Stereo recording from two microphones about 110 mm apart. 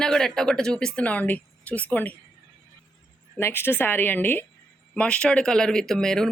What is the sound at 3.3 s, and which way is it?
Speech, 20° left (ahead or behind).